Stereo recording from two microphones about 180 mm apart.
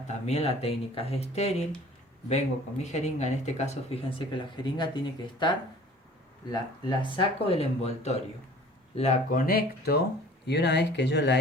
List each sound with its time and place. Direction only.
0.3 s speech: 35° left (ahead or behind); by 10.0 s 60° left (ahead or behind)
10.4 s speech: 70° left (ahead or behind)